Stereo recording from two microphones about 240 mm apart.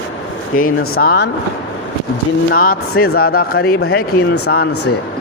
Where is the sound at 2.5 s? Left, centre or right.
Left.